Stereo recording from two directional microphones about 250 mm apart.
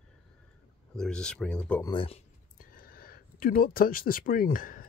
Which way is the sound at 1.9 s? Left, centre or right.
Left.